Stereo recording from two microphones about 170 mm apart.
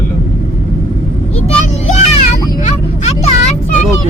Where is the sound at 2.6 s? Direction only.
40° left (ahead or behind).